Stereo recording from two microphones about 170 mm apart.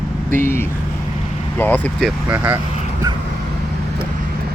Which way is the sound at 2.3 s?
10° right (ahead or behind).